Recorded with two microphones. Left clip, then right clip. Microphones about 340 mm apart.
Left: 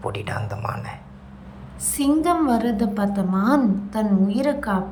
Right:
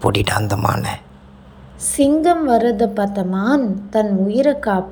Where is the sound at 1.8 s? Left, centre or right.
Centre.